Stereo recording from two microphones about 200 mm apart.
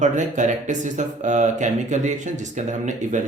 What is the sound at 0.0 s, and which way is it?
Speech, 40° right (ahead or behind).